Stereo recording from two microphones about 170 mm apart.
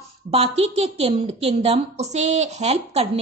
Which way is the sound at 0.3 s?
35° right (ahead or behind).